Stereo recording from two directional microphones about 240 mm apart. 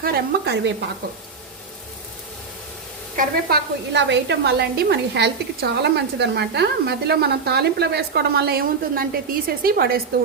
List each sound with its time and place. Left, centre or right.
0.0 s a woman's voice: right
3.2 s a woman's voice: right